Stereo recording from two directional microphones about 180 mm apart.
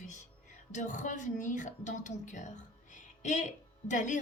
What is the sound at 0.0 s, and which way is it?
A woman's voice, 45° left (ahead or behind).